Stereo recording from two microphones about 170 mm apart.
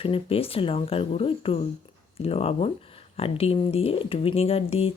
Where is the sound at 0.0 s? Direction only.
35° left (ahead or behind).